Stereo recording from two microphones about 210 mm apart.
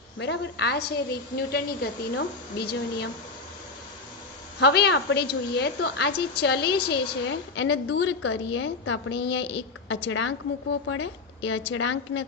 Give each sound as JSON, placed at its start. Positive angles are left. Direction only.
{"t": 0.2, "sound": "a woman's voice", "side_deg": 55}
{"t": 4.6, "sound": "a woman's voice", "side_deg": 50}